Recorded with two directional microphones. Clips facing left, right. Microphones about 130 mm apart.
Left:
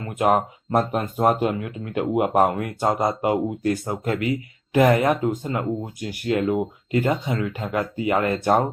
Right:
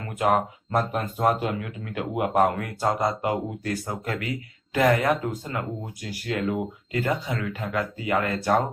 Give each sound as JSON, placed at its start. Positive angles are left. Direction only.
{"t": 0.2, "sound": "speech", "side_deg": 25}